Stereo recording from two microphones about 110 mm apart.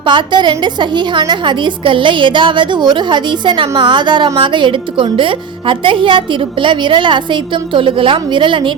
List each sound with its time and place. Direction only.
0.0 s a woman's voice: 45° right (ahead or behind)